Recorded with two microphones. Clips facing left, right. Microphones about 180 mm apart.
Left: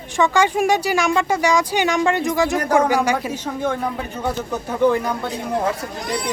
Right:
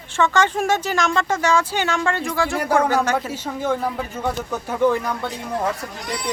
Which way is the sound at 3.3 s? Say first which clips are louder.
Even; 10° right (ahead or behind).